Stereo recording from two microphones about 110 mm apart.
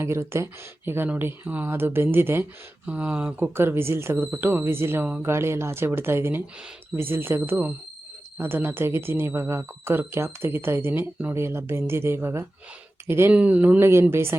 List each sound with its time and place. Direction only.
0.0 s speech: 25° right (ahead or behind)
3.3 s speech: 20° right (ahead or behind)